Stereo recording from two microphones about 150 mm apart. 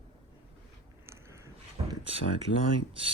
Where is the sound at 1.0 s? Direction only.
20° right (ahead or behind).